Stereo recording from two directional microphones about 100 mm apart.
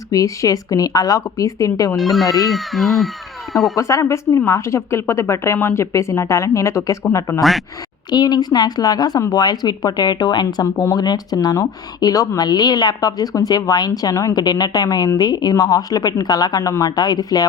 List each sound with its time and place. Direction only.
0.1 s speech: 35° left (ahead or behind)
2.0 s speech: centre (ahead or behind)
3.8 s a woman's voice: 30° left (ahead or behind)
8.1 s speech: 45° left (ahead or behind)
10.4 s speech: 35° left (ahead or behind)